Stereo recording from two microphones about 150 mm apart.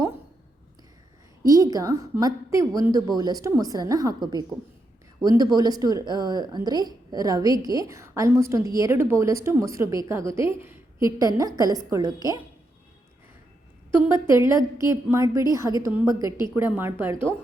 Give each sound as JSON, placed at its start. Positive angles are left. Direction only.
{"t": 1.5, "sound": "a woman's voice", "side_deg": -25}
{"t": 13.9, "sound": "a woman's voice", "side_deg": -15}